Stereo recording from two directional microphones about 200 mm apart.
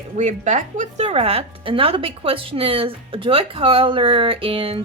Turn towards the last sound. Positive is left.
turn(degrees=-25)  # may be behind; listen again after turning